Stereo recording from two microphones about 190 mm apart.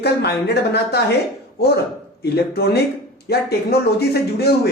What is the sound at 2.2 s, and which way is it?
Speech, 60° left (ahead or behind).